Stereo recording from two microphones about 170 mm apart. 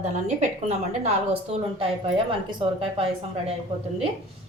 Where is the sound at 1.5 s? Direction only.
40° right (ahead or behind).